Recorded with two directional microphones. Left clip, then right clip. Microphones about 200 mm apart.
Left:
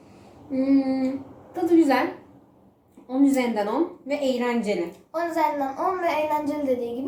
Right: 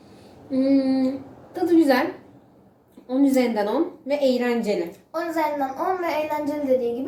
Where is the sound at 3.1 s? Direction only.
5° right (ahead or behind).